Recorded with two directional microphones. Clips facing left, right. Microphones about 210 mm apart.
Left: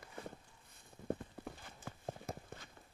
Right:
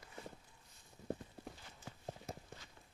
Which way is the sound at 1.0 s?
55° left (ahead or behind).